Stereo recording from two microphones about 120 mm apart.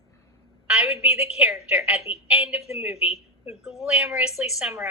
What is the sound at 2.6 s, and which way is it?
Speech, 60° left (ahead or behind).